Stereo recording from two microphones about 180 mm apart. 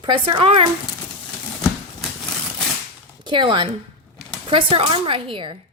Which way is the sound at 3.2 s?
25° right (ahead or behind).